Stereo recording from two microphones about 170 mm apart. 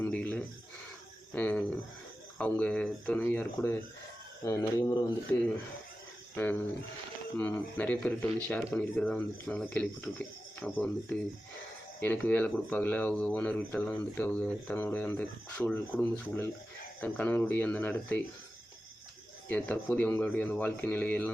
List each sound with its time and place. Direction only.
0.0 s a sound: 10° left (ahead or behind)
2.4 s speech: 5° left (ahead or behind)
6.3 s speech: 10° left (ahead or behind)
11.9 s speech: 10° left (ahead or behind)
19.5 s speech: 10° left (ahead or behind)